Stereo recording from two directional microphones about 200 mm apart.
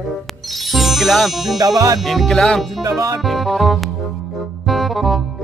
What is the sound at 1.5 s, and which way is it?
Music, 15° right (ahead or behind).